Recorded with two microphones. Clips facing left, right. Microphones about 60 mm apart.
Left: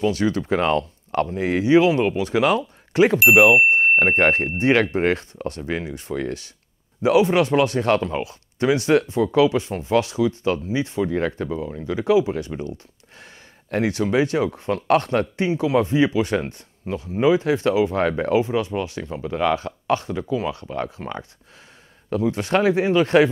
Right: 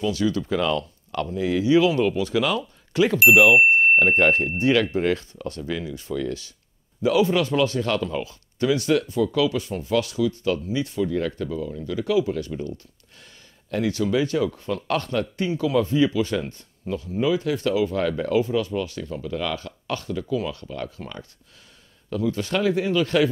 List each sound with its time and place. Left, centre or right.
0.0 s speech: left
13.2 s speech: left